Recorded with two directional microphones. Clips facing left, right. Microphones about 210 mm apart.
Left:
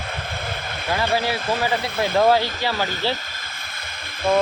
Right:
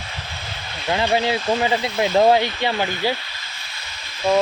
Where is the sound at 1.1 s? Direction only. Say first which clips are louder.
Right 3 dB; 20° right (ahead or behind).